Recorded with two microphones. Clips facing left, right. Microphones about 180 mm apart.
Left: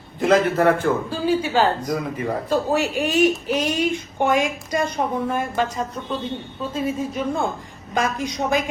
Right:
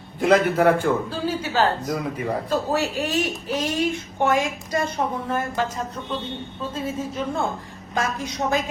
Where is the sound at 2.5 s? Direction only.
15° left (ahead or behind).